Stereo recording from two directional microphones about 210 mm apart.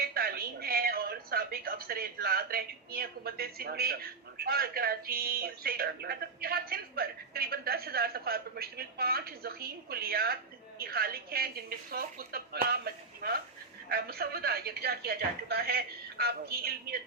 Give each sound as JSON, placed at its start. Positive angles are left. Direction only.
{"t": 0.0, "sound": "a woman's voice", "side_deg": -45}